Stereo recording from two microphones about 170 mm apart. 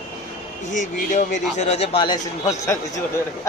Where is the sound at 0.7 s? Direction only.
50° left (ahead or behind).